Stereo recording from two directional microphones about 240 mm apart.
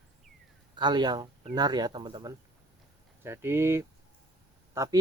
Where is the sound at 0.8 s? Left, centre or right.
Centre.